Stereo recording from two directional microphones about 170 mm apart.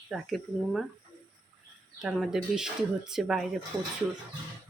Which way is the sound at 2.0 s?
Centre (ahead or behind).